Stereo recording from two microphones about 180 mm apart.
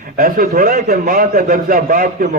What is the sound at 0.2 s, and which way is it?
A man's voice, 50° right (ahead or behind).